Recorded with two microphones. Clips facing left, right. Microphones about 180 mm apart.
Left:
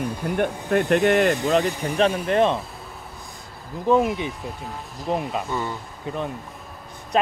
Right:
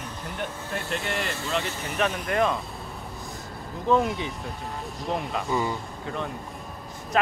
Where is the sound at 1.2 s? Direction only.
20° left (ahead or behind).